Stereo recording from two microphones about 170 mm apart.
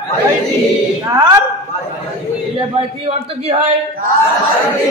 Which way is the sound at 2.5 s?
35° right (ahead or behind).